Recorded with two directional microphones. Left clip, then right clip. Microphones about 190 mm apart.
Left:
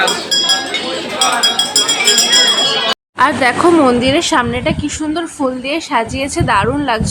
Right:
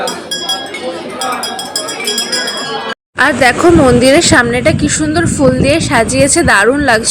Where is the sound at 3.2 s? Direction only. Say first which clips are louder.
Right 3 dB; 10° right (ahead or behind).